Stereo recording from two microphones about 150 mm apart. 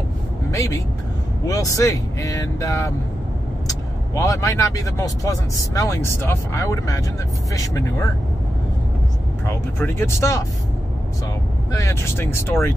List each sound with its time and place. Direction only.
0.5 s speech: 20° left (ahead or behind)
9.5 s speech: 15° left (ahead or behind)
11.7 s speech: 20° left (ahead or behind)